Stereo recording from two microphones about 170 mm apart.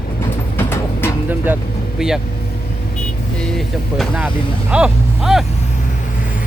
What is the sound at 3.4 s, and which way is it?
Vehicle, 5° left (ahead or behind).